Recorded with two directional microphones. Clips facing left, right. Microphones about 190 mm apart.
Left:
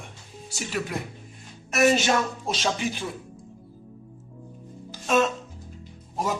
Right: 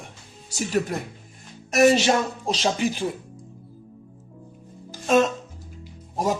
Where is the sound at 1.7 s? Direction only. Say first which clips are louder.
Right 3 dB; 30° right (ahead or behind).